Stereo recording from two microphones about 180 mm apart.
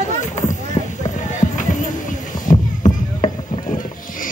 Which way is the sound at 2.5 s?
25° left (ahead or behind).